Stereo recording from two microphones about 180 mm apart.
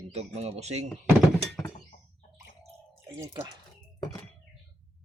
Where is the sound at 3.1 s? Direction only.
20° right (ahead or behind).